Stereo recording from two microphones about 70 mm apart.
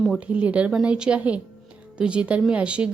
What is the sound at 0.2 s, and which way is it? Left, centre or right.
A woman's voice, centre.